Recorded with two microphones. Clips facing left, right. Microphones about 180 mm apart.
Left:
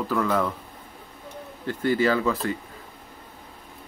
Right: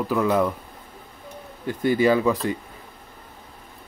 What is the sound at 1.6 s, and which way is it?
Speech, 15° right (ahead or behind).